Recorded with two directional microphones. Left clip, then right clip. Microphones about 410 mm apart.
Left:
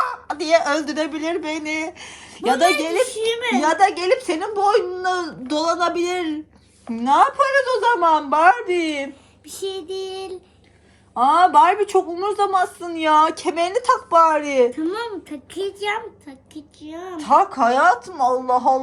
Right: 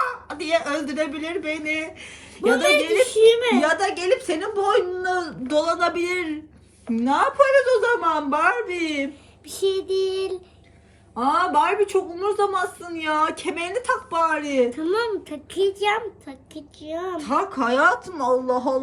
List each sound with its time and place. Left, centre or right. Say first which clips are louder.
0.0 s a woman's voice: left 3 dB; centre
3.2 s a woman's voice: right 6 dB; centre
3.6 s a woman's voice: left 4 dB; centre
9.5 s a woman's voice: right 5 dB; centre
11.1 s a woman's voice: left 6 dB; centre
14.7 s a woman's voice: right 2 dB; centre
17.2 s a woman's voice: left 9 dB; centre